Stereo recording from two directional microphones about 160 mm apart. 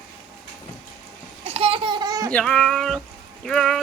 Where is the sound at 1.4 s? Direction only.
35° right (ahead or behind).